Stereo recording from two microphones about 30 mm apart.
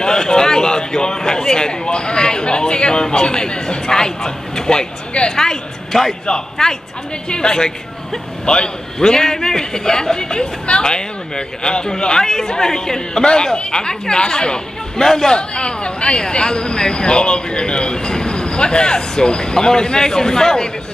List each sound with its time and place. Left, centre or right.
0.0 s speech: left
5.3 s a sound: centre
6.2 s speech: left
9.0 s speech: left
15.0 s speech: centre
15.3 s speech: left